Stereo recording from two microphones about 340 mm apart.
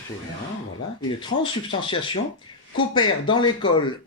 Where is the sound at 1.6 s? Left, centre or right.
Centre.